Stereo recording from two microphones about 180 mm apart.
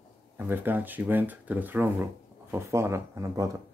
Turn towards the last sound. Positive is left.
turn(degrees=-20)  # may be behind; listen again after turning